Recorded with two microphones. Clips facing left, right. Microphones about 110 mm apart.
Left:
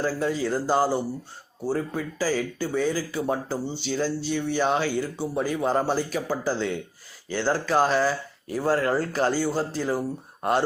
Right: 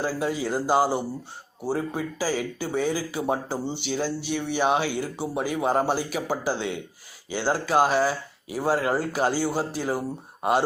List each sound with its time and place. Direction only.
0.0 s speech: 10° right (ahead or behind)